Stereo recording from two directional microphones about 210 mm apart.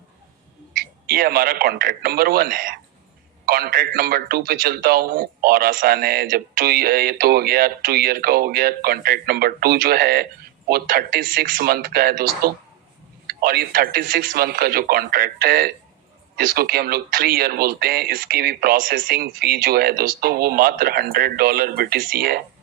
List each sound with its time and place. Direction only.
1.0 s a man's voice: 45° right (ahead or behind)